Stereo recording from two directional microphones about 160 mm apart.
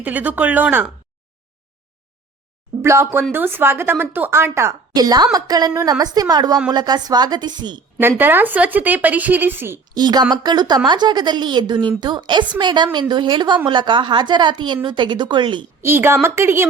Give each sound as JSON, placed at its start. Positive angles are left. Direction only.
{"t": 0.0, "sound": "a woman's voice", "side_deg": -10}
{"t": 2.8, "sound": "a woman's voice", "side_deg": -15}
{"t": 7.9, "sound": "a woman's voice", "side_deg": -10}
{"t": 9.9, "sound": "a woman's voice", "side_deg": -25}
{"t": 15.8, "sound": "a woman's voice", "side_deg": -15}